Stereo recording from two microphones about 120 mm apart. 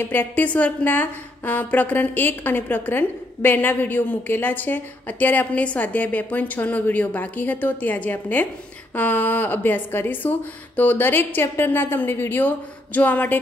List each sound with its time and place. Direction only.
0.0 s a woman's voice: 15° left (ahead or behind)